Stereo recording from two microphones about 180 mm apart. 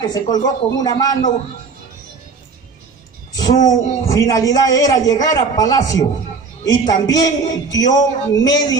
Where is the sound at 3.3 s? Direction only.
20° left (ahead or behind).